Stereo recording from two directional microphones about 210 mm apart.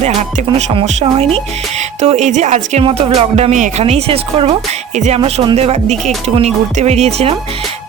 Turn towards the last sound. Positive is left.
turn(degrees=-30)  # may be behind; listen again after turning